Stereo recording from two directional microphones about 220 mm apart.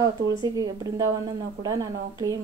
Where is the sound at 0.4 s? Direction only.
15° right (ahead or behind).